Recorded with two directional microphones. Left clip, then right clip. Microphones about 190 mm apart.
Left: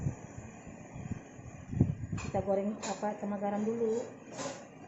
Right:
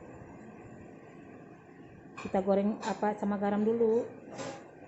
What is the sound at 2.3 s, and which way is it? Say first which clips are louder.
A woman's voice: right 3 dB; 60° right (ahead or behind).